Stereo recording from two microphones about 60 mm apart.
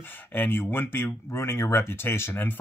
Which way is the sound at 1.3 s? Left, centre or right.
Left.